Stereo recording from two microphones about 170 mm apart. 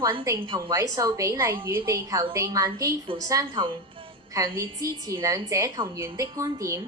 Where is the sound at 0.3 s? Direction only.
30° right (ahead or behind).